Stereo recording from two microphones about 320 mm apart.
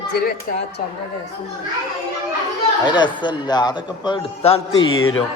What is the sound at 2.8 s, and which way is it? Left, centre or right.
Speech, centre.